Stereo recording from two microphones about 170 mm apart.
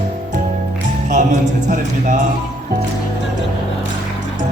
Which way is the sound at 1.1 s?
45° right (ahead or behind).